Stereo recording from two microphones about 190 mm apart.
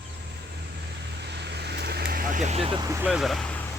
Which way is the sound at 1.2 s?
65° right (ahead or behind).